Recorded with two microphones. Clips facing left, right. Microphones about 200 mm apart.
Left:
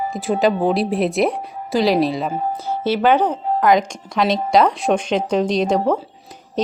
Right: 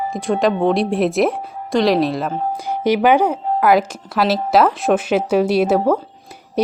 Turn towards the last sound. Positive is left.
turn(degrees=-10)  # may be behind; listen again after turning